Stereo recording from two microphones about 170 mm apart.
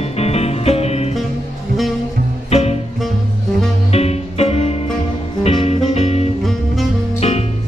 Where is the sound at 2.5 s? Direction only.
40° left (ahead or behind).